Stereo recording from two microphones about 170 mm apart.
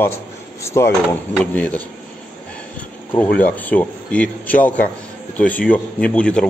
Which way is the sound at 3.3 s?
10° left (ahead or behind).